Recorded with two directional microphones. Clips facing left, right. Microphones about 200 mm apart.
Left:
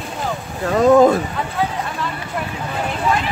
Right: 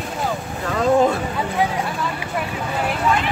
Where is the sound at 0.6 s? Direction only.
40° left (ahead or behind).